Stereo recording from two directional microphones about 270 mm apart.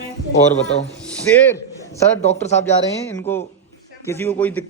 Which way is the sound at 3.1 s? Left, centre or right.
Centre.